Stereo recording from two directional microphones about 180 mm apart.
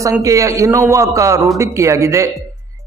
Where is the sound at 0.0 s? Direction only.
15° right (ahead or behind).